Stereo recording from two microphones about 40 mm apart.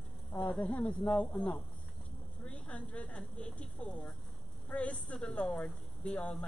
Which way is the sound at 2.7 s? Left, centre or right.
Left.